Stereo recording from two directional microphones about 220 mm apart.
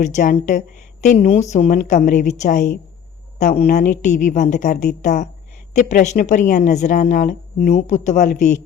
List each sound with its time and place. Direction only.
0.0 s speech: 35° left (ahead or behind)